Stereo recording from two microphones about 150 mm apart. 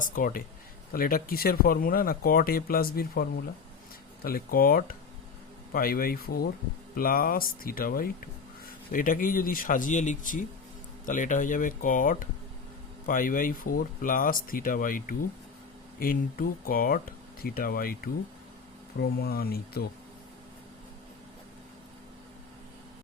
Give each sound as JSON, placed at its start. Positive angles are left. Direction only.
{"t": 0.2, "sound": "speech", "side_deg": 65}
{"t": 0.9, "sound": "speech", "side_deg": 75}
{"t": 6.9, "sound": "speech", "side_deg": 70}
{"t": 19.2, "sound": "speech", "side_deg": 90}